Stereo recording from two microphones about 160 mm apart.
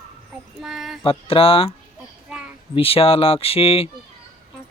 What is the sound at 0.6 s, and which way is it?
Female singing, centre (ahead or behind).